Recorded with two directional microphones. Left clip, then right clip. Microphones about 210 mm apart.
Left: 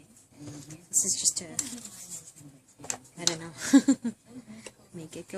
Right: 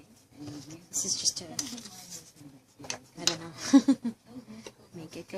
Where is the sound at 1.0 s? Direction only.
20° left (ahead or behind).